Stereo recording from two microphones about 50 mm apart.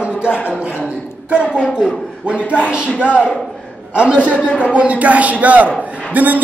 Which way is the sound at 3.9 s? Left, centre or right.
Centre.